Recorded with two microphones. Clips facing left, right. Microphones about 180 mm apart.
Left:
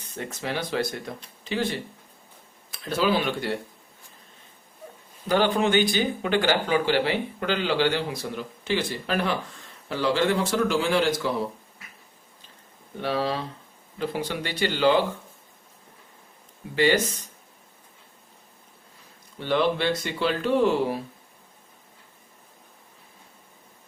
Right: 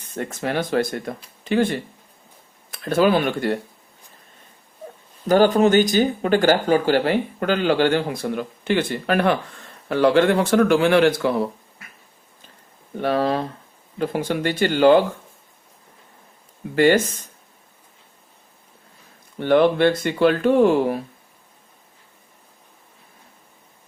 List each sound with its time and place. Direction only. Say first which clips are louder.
0.2 s speech: right 6 dB; 50° right (ahead or behind)
5.3 s speech: right 7 dB; 45° right (ahead or behind); by 11.3 s 60° right (ahead or behind)
13.0 s speech: right 6 dB; 50° right (ahead or behind)
16.7 s speech: right 6 dB; 50° right (ahead or behind)
19.4 s speech: right 8 dB; 55° right (ahead or behind)